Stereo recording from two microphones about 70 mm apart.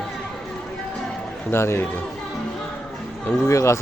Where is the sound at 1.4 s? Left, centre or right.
Left.